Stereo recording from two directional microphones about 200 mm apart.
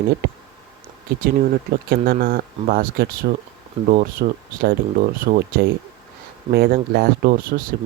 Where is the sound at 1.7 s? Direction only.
50° right (ahead or behind).